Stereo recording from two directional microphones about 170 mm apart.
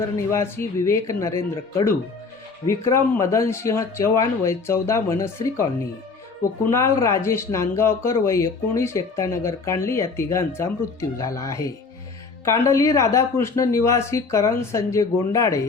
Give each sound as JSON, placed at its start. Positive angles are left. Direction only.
{"t": 0.3, "sound": "speech", "side_deg": 15}
{"t": 6.7, "sound": "speech", "side_deg": 15}